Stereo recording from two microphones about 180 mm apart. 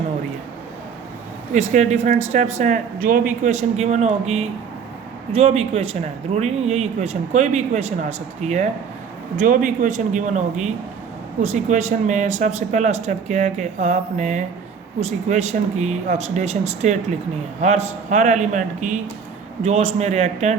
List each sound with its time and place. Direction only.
1.5 s a man's voice: 40° right (ahead or behind)